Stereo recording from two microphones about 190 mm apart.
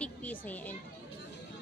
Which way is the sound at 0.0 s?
10° left (ahead or behind).